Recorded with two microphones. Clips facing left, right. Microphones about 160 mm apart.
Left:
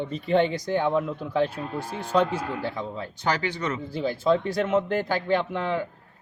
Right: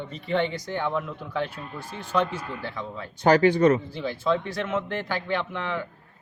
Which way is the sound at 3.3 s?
40° right (ahead or behind).